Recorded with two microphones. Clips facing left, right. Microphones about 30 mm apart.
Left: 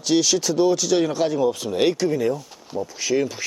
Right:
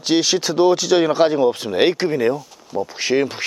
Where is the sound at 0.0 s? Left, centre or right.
Right.